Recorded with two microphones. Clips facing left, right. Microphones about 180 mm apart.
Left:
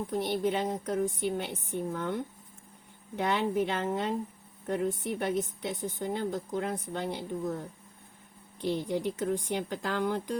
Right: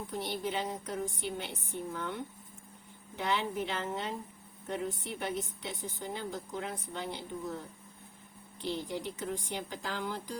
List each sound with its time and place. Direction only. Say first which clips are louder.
0.1 s a woman's voice: left 6 dB; 50° left (ahead or behind)
3.2 s a woman's voice: left 5 dB; 50° left (ahead or behind)
8.6 s a woman's voice: left 6 dB; 55° left (ahead or behind)